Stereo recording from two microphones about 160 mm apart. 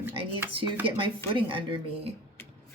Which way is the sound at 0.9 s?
35° right (ahead or behind).